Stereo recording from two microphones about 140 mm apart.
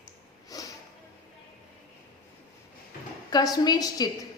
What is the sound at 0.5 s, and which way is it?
Sniff, 25° left (ahead or behind).